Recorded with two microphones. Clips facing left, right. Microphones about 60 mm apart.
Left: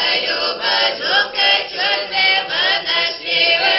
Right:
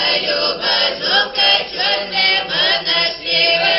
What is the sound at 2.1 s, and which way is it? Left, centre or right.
Chant, left.